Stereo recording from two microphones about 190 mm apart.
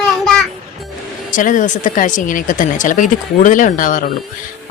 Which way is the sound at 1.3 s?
45° left (ahead or behind).